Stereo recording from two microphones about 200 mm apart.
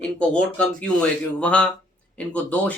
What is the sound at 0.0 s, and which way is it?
Speech, 5° left (ahead or behind).